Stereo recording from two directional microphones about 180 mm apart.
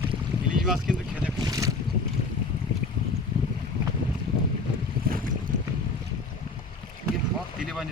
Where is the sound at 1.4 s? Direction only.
20° right (ahead or behind).